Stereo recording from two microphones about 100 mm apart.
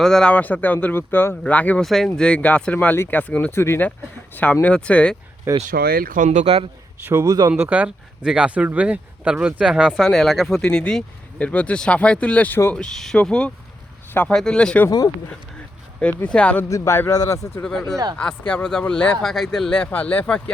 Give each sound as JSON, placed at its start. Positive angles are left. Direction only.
{"t": 0.0, "sound": "speech", "side_deg": 5}
{"t": 1.8, "sound": "speech", "side_deg": 5}
{"t": 4.6, "sound": "speech", "side_deg": 10}
{"t": 5.5, "sound": "speech", "side_deg": -25}
{"t": 6.4, "sound": "speech", "side_deg": -90}
{"t": 7.1, "sound": "speech", "side_deg": -25}
{"t": 14.1, "sound": "speech", "side_deg": 20}
{"t": 14.3, "sound": "speech", "side_deg": 5}
{"t": 14.8, "sound": "speech", "side_deg": 40}
{"t": 16.0, "sound": "speech", "side_deg": 10}
{"t": 16.6, "sound": "speech", "side_deg": 30}
{"t": 17.6, "sound": "speech", "side_deg": 5}
{"t": 17.9, "sound": "speech", "side_deg": -40}
{"t": 18.2, "sound": "speech", "side_deg": 10}